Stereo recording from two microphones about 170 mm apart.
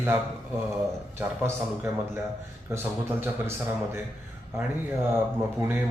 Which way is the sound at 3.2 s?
15° right (ahead or behind).